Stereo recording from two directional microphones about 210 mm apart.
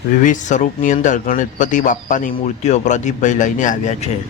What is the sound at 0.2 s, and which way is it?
Speech, 35° left (ahead or behind).